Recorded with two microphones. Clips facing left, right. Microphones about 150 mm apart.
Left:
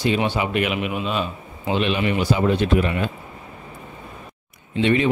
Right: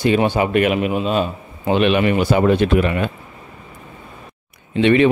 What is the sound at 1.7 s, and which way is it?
A man's voice, 60° right (ahead or behind).